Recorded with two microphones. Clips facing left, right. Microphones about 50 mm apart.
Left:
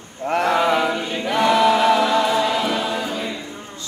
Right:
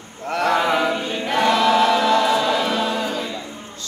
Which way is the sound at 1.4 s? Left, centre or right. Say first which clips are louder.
Left 1 dB; centre.